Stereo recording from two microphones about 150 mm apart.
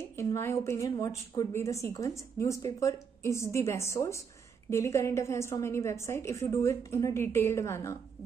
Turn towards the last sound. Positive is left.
turn(degrees=20)  # may be behind; listen again after turning